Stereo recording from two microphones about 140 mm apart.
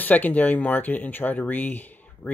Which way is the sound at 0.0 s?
10° left (ahead or behind).